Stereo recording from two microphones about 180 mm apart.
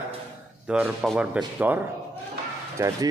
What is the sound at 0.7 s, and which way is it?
Speech, 5° right (ahead or behind).